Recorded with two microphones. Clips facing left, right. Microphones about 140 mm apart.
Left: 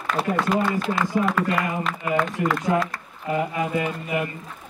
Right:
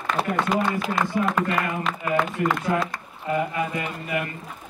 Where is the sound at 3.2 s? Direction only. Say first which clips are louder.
Even; 20° left (ahead or behind).